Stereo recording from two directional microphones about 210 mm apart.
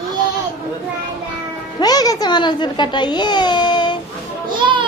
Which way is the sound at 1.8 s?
20° left (ahead or behind).